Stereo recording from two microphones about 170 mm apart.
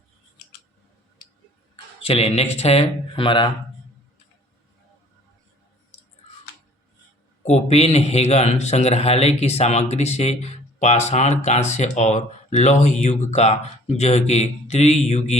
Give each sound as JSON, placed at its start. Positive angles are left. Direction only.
{"t": 1.7, "sound": "speech", "side_deg": 35}
{"t": 7.4, "sound": "a man's voice", "side_deg": 40}